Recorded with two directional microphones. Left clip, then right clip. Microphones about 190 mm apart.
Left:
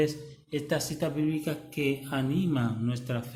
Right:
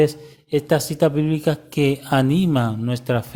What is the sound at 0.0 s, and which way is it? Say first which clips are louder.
Speech: right 10 dB; 45° right (ahead or behind).